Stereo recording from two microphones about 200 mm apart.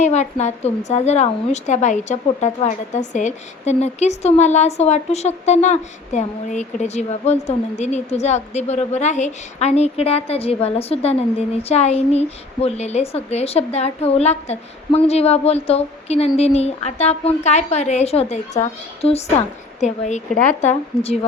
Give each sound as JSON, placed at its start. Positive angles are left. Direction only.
{"t": 0.0, "sound": "a woman's voice", "side_deg": 35}